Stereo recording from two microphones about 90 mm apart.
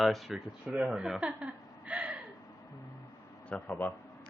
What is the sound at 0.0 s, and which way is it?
Speech, centre (ahead or behind).